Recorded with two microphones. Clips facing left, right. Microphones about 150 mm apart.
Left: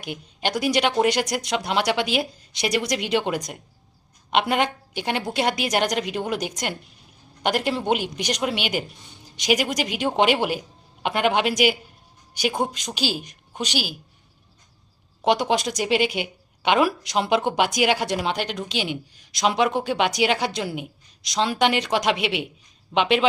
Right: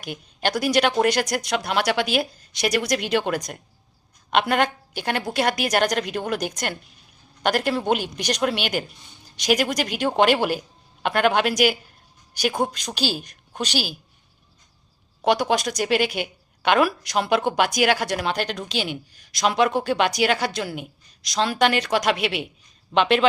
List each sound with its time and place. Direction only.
0.0 s a woman's voice: 20° left (ahead or behind)
15.2 s a woman's voice: 20° left (ahead or behind)